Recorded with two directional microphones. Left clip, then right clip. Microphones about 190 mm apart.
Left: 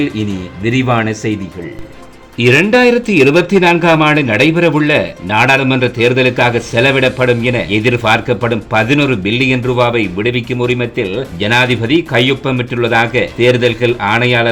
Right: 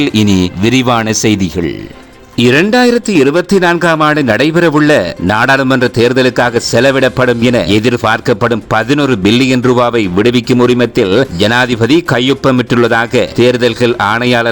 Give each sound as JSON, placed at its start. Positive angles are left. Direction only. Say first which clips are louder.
{"t": 0.0, "sound": "speech", "louder": "right 7 dB", "side_deg": -45}
{"t": 2.4, "sound": "speech", "louder": "even", "side_deg": -40}